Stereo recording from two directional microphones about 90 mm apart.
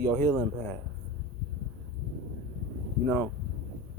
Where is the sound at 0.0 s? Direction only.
20° left (ahead or behind).